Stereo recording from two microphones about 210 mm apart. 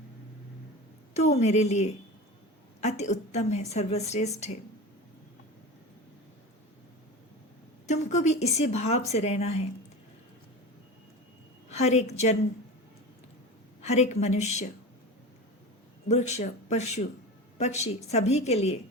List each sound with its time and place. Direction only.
1.1 s a woman's voice: 30° left (ahead or behind)
7.9 s a woman's voice: 35° left (ahead or behind)
11.7 s a woman's voice: 30° left (ahead or behind)
13.8 s a woman's voice: 30° left (ahead or behind)
16.0 s a woman's voice: 30° left (ahead or behind)